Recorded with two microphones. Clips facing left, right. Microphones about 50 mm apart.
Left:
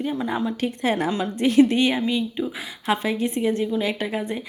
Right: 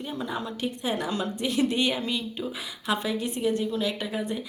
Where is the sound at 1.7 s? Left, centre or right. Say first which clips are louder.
Left 5 dB; left.